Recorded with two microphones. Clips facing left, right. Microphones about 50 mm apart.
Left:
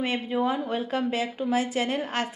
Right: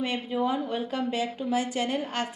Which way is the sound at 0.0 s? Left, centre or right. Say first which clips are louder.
Left 2 dB; centre.